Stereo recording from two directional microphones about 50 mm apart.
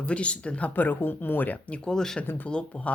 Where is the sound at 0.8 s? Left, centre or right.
Left.